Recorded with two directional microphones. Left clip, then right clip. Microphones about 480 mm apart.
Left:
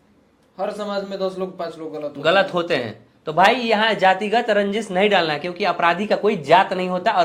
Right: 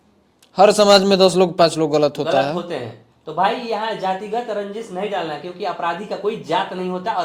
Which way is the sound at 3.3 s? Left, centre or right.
Centre.